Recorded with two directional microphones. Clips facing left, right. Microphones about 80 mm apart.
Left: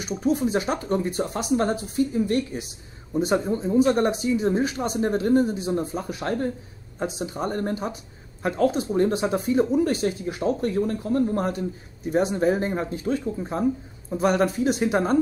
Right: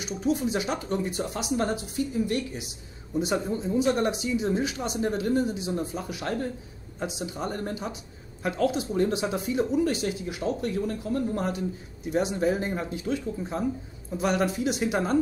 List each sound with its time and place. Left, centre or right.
0.0 s speech: left
3.2 s speech: left